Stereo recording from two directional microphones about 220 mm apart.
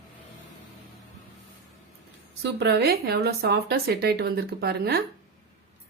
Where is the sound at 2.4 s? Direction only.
50° right (ahead or behind).